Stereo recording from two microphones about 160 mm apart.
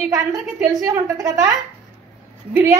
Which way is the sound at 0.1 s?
20° right (ahead or behind).